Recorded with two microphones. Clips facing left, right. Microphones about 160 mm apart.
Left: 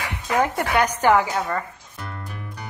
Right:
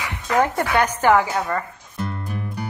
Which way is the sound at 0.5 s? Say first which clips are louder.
Right 1 dB; 15° left (ahead or behind).